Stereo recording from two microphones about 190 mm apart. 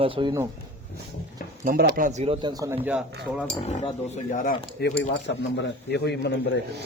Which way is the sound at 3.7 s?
35° left (ahead or behind).